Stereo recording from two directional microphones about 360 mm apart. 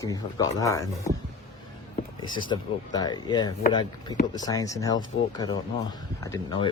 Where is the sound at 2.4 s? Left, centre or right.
Centre.